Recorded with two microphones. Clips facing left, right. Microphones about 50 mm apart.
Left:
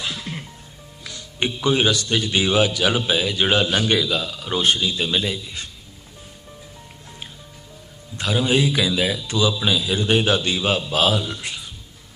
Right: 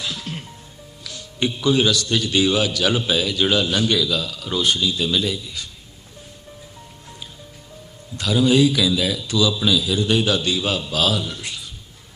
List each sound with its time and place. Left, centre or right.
1.0 s a man's voice: left
8.2 s a man's voice: left
11.4 s a sound: centre